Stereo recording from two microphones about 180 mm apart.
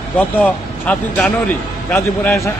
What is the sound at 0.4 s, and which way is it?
A man's voice, 5° left (ahead or behind).